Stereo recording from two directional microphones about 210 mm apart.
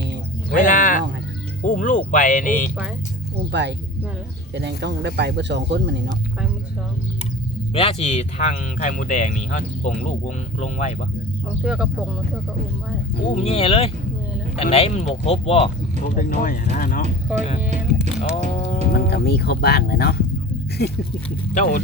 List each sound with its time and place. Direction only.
0.5 s a sound: 40° left (ahead or behind)
1.6 s speech: 40° left (ahead or behind)
3.5 s speech: 55° right (ahead or behind)
7.7 s speech: 25° left (ahead or behind)
11.6 s speech: 5° right (ahead or behind)
13.2 s speech: 30° left (ahead or behind)
16.1 s speech: 40° left (ahead or behind)
18.2 s speech: 30° left (ahead or behind)
18.9 s speech: 50° left (ahead or behind)
21.5 s speech: 35° left (ahead or behind)